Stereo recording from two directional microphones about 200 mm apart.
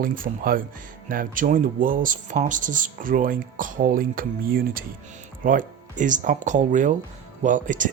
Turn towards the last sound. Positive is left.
turn(degrees=-40)  # may be behind; listen again after turning